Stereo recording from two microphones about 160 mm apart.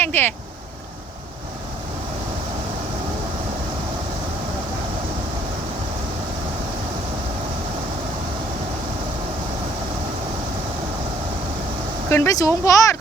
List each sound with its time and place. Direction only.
0.0 s speech: 10° left (ahead or behind)
12.1 s speech: 20° left (ahead or behind)